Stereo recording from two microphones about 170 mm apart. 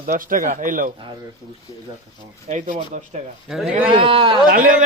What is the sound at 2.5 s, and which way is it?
Speech, 45° right (ahead or behind).